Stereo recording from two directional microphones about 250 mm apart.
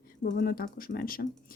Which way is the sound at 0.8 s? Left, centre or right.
Left.